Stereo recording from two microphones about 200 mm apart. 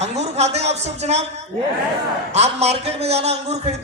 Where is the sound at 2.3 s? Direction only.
30° right (ahead or behind).